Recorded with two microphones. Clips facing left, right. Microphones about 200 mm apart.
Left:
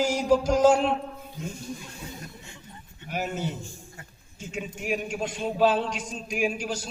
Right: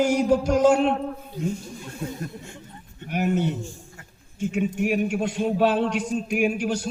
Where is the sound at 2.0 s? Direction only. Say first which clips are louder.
Right 9 dB; 55° right (ahead or behind).